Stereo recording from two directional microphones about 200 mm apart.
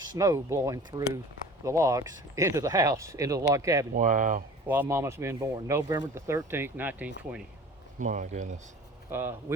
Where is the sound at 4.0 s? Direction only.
40° right (ahead or behind).